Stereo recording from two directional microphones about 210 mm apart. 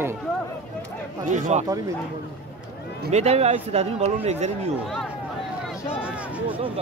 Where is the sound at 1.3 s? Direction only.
35° right (ahead or behind).